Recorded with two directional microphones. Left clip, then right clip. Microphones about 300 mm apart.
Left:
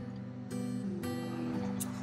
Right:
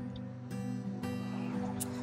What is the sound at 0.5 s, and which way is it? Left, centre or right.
Music, centre.